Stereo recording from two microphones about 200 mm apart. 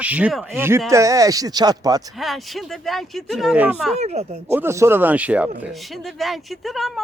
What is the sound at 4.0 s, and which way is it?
Speech, 35° right (ahead or behind).